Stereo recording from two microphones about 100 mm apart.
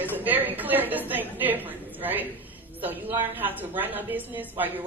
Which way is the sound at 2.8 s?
20° right (ahead or behind).